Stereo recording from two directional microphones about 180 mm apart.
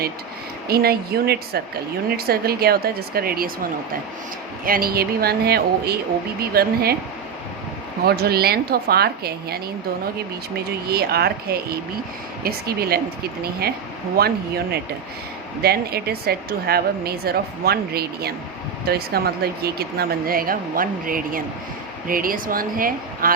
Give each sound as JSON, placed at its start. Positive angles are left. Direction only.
{"t": 0.7, "sound": "a woman's voice", "side_deg": -60}
{"t": 8.0, "sound": "a woman's voice", "side_deg": -60}
{"t": 10.8, "sound": "a woman's voice", "side_deg": -60}